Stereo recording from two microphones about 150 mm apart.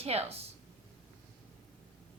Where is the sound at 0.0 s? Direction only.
45° right (ahead or behind).